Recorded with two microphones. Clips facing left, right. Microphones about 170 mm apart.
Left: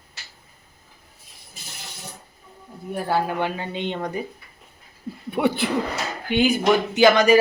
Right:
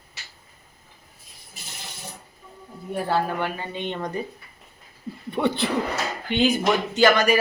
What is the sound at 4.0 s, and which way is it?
Speech, 10° left (ahead or behind).